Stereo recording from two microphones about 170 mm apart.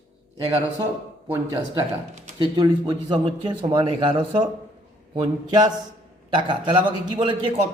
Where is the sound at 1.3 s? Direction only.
20° right (ahead or behind).